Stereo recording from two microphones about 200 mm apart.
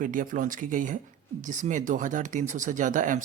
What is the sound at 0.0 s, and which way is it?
Speech, 40° right (ahead or behind).